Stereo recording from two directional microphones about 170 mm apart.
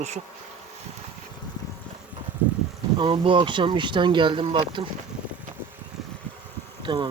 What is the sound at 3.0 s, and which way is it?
Speech, 30° right (ahead or behind).